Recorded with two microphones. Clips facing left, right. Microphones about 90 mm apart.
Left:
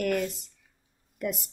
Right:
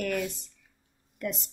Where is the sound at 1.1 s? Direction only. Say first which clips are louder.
Left 2 dB; 10° left (ahead or behind).